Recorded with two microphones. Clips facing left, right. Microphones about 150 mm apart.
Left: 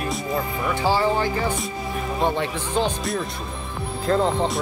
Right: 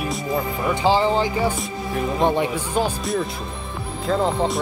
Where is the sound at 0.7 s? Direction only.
20° right (ahead or behind).